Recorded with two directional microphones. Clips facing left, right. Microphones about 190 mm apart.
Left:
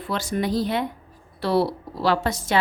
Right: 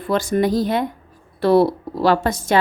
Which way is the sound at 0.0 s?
50° right (ahead or behind).